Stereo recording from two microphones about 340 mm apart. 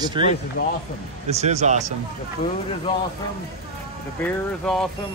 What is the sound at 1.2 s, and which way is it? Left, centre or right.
Speech, centre.